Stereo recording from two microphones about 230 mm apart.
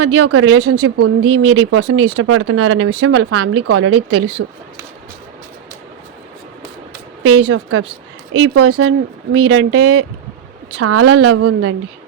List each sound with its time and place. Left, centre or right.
0.0 s speech: right
1.3 s speech: right
7.2 s speech: right
10.8 s a woman's voice: right